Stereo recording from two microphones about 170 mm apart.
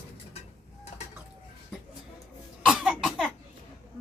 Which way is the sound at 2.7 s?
Centre (ahead or behind).